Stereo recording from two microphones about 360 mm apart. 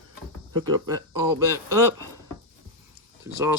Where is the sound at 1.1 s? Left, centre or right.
Centre.